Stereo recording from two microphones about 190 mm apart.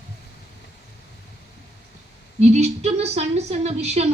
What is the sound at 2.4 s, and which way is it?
Speech, 35° right (ahead or behind).